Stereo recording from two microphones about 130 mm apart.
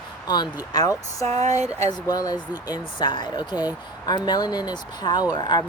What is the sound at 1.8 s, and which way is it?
Speech, 30° left (ahead or behind).